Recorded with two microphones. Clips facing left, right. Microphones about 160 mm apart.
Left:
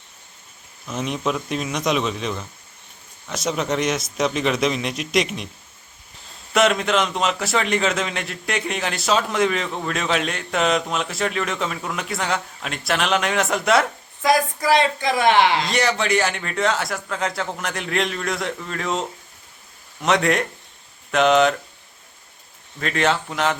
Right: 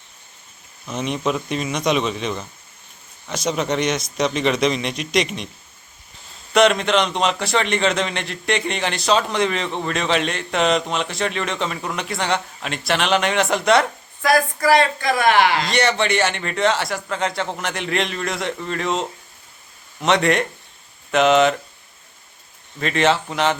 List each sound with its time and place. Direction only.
0.9 s a man's voice: centre (ahead or behind)
6.5 s a man's voice: centre (ahead or behind)
14.2 s speech: 20° left (ahead or behind)
15.6 s a man's voice: centre (ahead or behind)
22.8 s a man's voice: centre (ahead or behind)